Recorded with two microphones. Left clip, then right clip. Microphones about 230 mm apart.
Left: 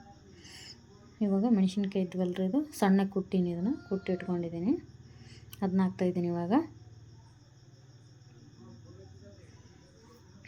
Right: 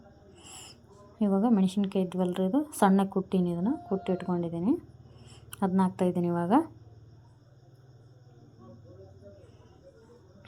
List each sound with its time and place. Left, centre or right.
0.3 s owl: centre
1.2 s a woman's voice: centre